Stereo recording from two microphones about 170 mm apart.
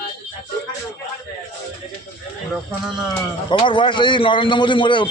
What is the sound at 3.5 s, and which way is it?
A man's voice, 30° left (ahead or behind).